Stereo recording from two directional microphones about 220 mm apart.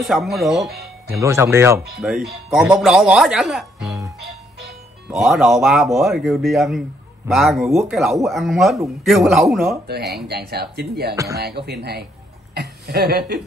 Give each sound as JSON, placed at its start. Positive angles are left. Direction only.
{"t": 0.0, "sound": "speech", "side_deg": 0}
{"t": 1.2, "sound": "speech", "side_deg": -10}
{"t": 10.2, "sound": "a woman's voice", "side_deg": -45}